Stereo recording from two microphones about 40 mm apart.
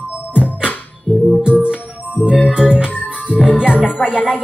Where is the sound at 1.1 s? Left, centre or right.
Left.